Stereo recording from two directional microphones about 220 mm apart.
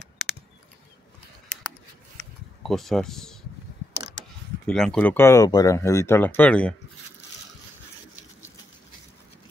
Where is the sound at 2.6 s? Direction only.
Centre (ahead or behind).